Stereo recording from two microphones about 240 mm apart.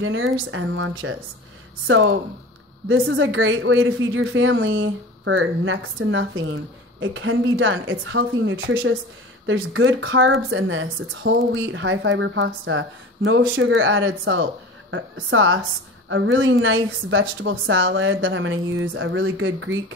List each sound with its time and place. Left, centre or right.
0.0 s a woman's voice: right